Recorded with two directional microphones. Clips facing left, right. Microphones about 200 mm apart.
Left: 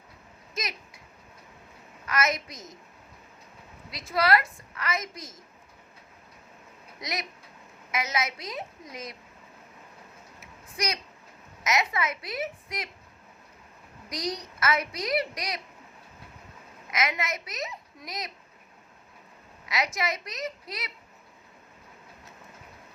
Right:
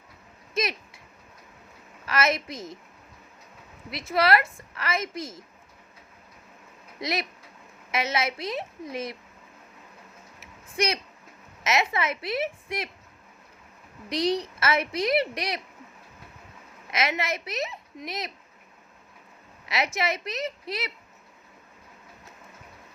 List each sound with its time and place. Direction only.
0.5 s a sound: 25° right (ahead or behind)
2.0 s a woman's voice: 30° right (ahead or behind)
3.9 s a woman's voice: 25° right (ahead or behind)
7.0 s a woman's voice: 30° right (ahead or behind)
10.4 s a sound: 30° right (ahead or behind)
11.6 s a woman's voice: 25° right (ahead or behind)
14.1 s a woman's voice: 30° right (ahead or behind)
16.9 s a woman's voice: 30° right (ahead or behind)
19.6 s a woman's voice: 25° right (ahead or behind)